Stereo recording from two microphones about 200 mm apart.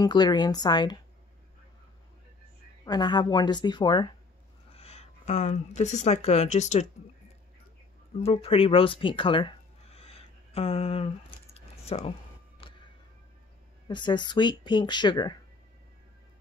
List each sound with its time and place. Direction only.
0.0 s speech: 20° left (ahead or behind)
2.8 s speech: 20° left (ahead or behind)
4.7 s a sound: 30° left (ahead or behind)
5.8 s speech: 35° left (ahead or behind)
8.2 s speech: 30° left (ahead or behind)
11.5 s a sound: 30° left (ahead or behind)
12.5 s music: 25° left (ahead or behind)
13.8 s speech: 20° left (ahead or behind)